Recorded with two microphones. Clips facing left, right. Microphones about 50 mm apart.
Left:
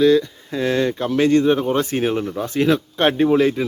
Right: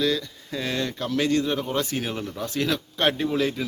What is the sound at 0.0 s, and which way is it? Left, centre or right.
A man's voice, left.